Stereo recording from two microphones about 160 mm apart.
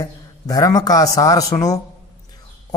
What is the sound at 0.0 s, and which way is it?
A man's voice, 20° left (ahead or behind).